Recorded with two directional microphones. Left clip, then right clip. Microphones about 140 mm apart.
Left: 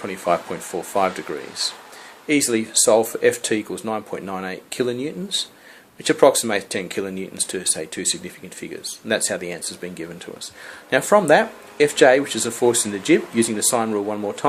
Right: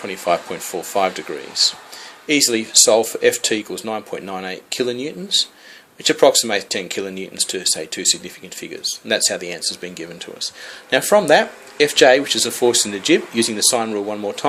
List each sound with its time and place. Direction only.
0.0 s speech: 15° right (ahead or behind)